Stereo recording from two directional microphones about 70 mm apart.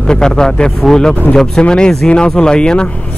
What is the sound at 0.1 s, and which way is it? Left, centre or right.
Speech, centre.